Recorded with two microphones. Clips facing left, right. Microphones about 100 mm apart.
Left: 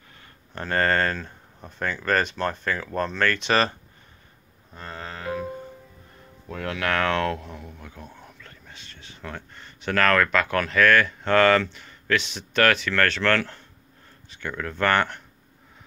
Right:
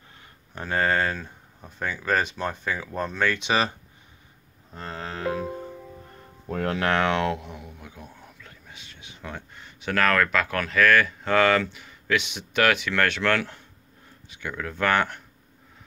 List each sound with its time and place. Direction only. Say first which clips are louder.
0.6 s speech: left 1 dB; 5° right (ahead or behind)
4.8 s music: right 2 dB; centre (ahead or behind)
6.5 s speech: right 2 dB; 35° right (ahead or behind); by 15.2 s 5° right (ahead or behind)